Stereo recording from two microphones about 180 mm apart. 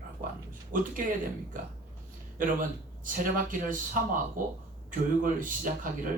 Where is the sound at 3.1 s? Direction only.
50° right (ahead or behind).